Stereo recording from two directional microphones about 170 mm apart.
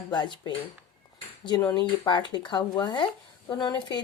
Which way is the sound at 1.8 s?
25° left (ahead or behind).